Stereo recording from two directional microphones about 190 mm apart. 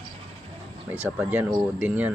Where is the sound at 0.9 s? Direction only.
10° right (ahead or behind).